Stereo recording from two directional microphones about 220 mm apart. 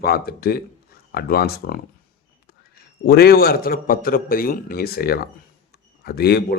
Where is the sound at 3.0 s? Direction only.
45° left (ahead or behind).